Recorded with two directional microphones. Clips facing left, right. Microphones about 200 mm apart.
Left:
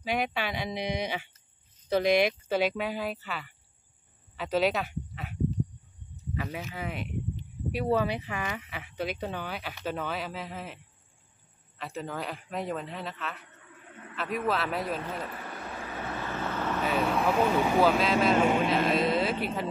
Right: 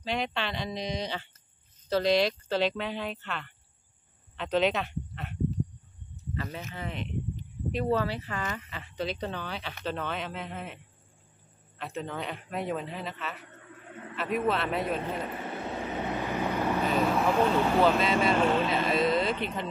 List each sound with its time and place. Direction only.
0.1 s speech: 10° left (ahead or behind)
11.8 s a man's voice: centre (ahead or behind)
15.0 s vehicle: 20° right (ahead or behind)
17.0 s speech: centre (ahead or behind)
18.7 s a sound: centre (ahead or behind)
19.4 s speech: 5° left (ahead or behind)